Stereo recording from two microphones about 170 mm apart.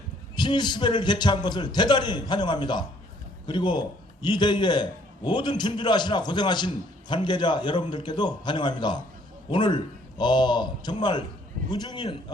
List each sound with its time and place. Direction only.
0.3 s a man's voice: 25° left (ahead or behind)